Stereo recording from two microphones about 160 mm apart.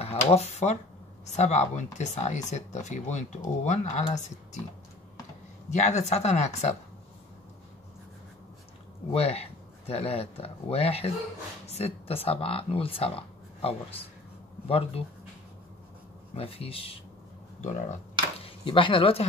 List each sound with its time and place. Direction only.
0.0 s speech: 40° left (ahead or behind)
5.7 s speech: 45° left (ahead or behind)
9.1 s speech: 40° left (ahead or behind)
15.0 s speech: 40° left (ahead or behind)
16.3 s speech: 35° left (ahead or behind)
17.6 s speech: 50° left (ahead or behind)
18.4 s speech: 30° left (ahead or behind)